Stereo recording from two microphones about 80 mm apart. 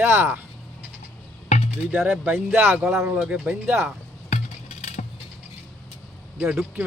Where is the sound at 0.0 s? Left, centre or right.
Right.